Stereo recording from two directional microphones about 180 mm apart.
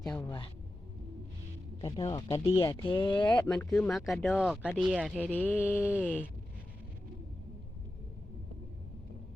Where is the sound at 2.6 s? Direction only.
30° left (ahead or behind).